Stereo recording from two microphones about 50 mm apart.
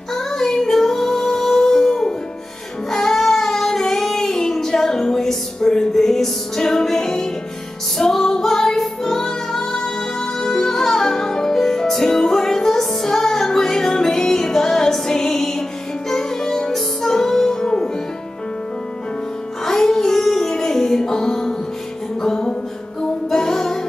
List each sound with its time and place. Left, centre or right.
0.1 s music: centre
2.9 s child singing: centre
8.0 s music: centre
19.6 s music: centre
22.2 s a sound: centre
23.3 s music: centre